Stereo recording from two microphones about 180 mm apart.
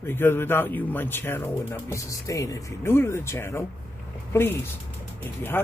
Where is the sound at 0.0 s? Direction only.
10° left (ahead or behind).